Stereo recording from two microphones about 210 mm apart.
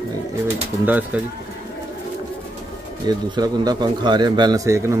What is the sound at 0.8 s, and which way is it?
Speech, 10° right (ahead or behind).